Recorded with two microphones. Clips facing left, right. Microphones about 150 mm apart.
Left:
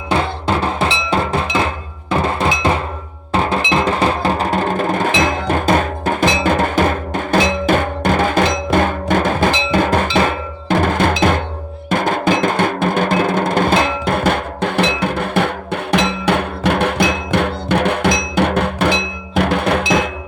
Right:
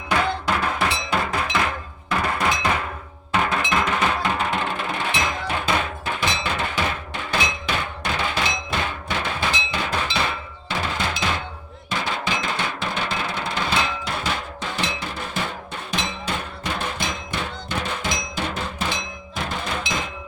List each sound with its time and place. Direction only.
0.1 s music: 25° left (ahead or behind); by 6.2 s 45° left (ahead or behind)
6.3 s drum: 50° left (ahead or behind); by 20.1 s 70° left (ahead or behind)